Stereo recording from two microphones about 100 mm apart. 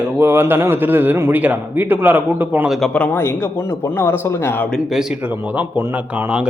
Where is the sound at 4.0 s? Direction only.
25° left (ahead or behind).